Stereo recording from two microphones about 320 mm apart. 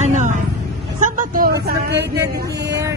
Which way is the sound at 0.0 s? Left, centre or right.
Right.